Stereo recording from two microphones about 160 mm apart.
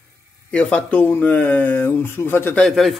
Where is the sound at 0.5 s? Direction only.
10° left (ahead or behind).